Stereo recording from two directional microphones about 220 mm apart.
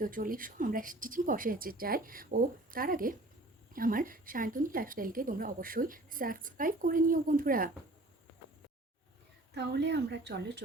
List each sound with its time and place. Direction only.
0.0 s a woman's voice: 40° right (ahead or behind)
9.6 s speech: 50° right (ahead or behind)